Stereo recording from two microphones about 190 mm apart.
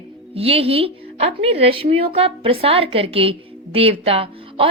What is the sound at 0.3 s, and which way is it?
A woman's voice, 30° right (ahead or behind).